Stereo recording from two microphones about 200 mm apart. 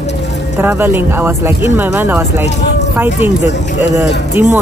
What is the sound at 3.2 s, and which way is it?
Speech, 35° left (ahead or behind).